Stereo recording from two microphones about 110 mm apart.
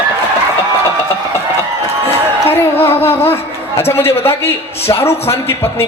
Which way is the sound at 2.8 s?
20° left (ahead or behind).